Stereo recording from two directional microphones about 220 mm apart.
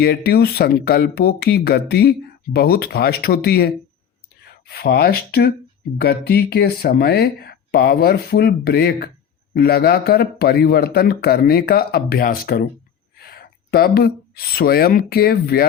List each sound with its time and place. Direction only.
0.0 s speech: 45° left (ahead or behind)